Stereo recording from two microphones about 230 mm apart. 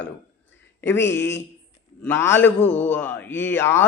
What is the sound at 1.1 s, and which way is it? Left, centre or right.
Speech, left.